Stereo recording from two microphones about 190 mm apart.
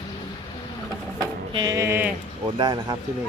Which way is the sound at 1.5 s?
20° right (ahead or behind).